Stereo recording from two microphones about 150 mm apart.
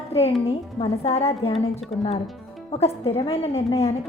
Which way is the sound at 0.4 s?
45° left (ahead or behind).